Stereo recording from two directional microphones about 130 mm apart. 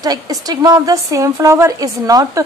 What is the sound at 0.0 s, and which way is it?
A woman's voice, 30° right (ahead or behind).